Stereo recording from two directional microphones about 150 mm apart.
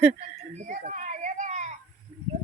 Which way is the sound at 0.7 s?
55° right (ahead or behind).